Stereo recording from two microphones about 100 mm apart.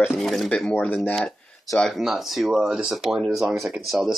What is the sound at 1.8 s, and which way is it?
Speech, centre (ahead or behind).